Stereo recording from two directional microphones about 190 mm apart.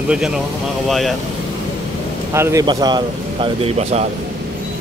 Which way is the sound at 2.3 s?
15° right (ahead or behind).